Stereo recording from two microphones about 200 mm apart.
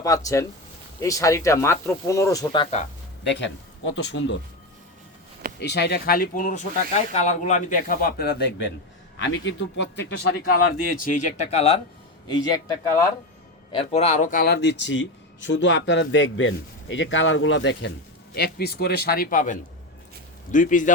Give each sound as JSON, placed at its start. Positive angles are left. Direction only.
{"t": 0.0, "sound": "speech", "side_deg": 15}
{"t": 3.2, "sound": "speech", "side_deg": 65}
{"t": 5.5, "sound": "speech", "side_deg": 55}
{"t": 10.5, "sound": "speech", "side_deg": 45}
{"t": 13.7, "sound": "speech", "side_deg": 30}
{"t": 18.3, "sound": "speech", "side_deg": 55}